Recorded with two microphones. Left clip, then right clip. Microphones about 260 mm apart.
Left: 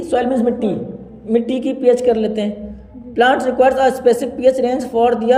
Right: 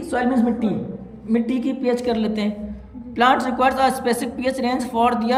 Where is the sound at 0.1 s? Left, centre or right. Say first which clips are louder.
Left 5 dB; centre.